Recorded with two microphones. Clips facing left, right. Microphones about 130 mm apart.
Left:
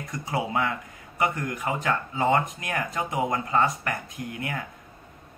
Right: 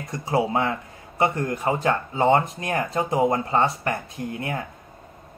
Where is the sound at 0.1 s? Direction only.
30° right (ahead or behind).